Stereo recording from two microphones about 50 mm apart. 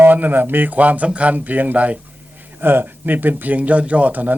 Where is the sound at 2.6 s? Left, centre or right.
Right.